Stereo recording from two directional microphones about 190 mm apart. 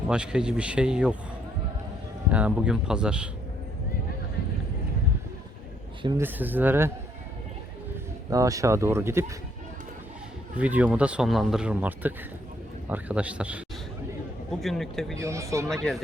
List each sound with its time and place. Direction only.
0.1 s speech: 5° right (ahead or behind)
2.3 s speech: 5° right (ahead or behind)
6.0 s speech: 20° right (ahead or behind)
6.2 s speech: 10° right (ahead or behind)
8.3 s speech: 15° right (ahead or behind)
10.6 s speech: 10° right (ahead or behind)
14.6 s speech: centre (ahead or behind)
15.2 s speech: 15° right (ahead or behind)
15.7 s speech: centre (ahead or behind)